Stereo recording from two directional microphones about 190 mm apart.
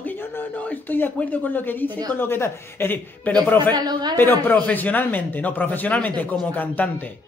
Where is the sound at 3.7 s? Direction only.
20° right (ahead or behind).